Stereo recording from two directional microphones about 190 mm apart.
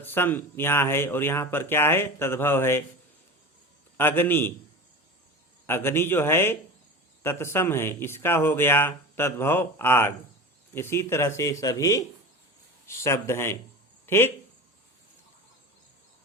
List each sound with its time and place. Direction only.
0.0 s speech: 10° left (ahead or behind)
3.9 s speech: 10° left (ahead or behind)
5.6 s speech: 10° left (ahead or behind)